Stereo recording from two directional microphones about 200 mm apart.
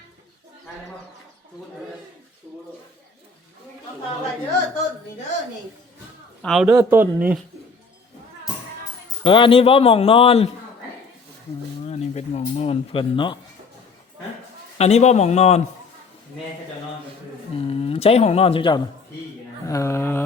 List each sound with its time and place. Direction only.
6.4 s a man's voice: centre (ahead or behind)
9.2 s a man's voice: 25° left (ahead or behind)
11.9 s speech: 30° left (ahead or behind)
14.8 s speech: 30° left (ahead or behind)
17.7 s speech: 30° left (ahead or behind)
19.6 s speech: 15° left (ahead or behind)